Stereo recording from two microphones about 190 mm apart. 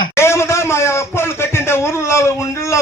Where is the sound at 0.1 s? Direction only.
15° left (ahead or behind).